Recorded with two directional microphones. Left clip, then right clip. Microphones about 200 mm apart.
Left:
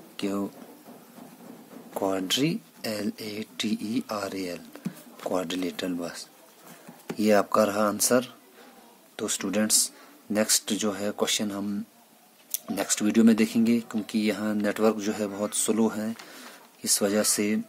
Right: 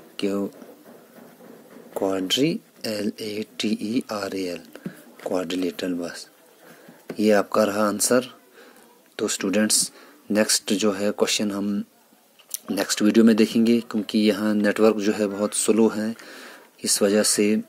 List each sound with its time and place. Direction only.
0.2 s speech: 15° right (ahead or behind)
2.0 s speech: 10° right (ahead or behind)